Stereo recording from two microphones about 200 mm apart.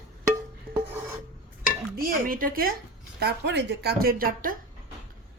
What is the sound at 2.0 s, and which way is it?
Speech, 45° right (ahead or behind).